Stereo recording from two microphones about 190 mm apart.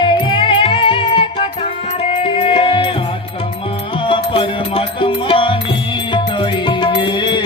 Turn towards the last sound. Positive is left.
turn(degrees=25)  # may be behind; listen again after turning